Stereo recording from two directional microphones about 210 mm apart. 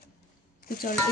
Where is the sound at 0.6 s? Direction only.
45° left (ahead or behind).